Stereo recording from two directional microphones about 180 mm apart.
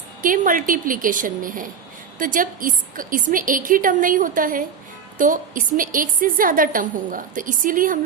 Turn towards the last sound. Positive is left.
turn(degrees=-50)  # may be behind; listen again after turning